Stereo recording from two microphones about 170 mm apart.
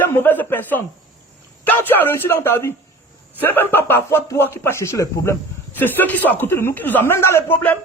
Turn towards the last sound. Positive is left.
turn(degrees=10)  # may be behind; listen again after turning